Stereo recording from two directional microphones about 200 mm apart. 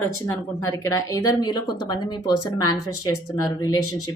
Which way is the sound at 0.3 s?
15° left (ahead or behind).